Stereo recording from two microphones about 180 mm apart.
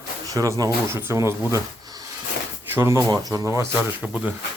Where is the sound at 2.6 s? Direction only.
15° right (ahead or behind).